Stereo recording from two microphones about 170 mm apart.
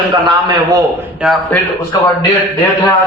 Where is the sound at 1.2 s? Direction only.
Centre (ahead or behind).